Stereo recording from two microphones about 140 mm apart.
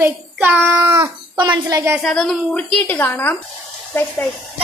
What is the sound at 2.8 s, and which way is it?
Speech, 15° left (ahead or behind).